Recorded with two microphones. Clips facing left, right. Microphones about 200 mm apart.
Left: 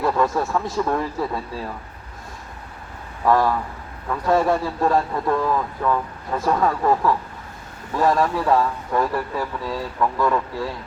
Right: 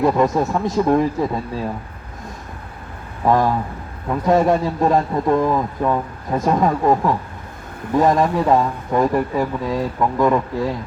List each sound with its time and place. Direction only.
0.0 s a man's voice: 15° right (ahead or behind)
3.2 s a man's voice: 20° right (ahead or behind)